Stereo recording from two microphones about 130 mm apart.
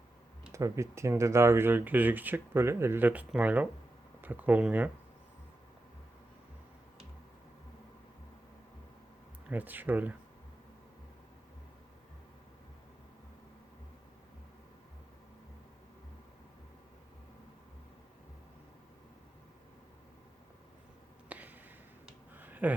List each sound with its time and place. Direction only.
0.5 s speech: 25° right (ahead or behind)
9.5 s speech: 15° right (ahead or behind)
21.2 s a sound: 10° right (ahead or behind)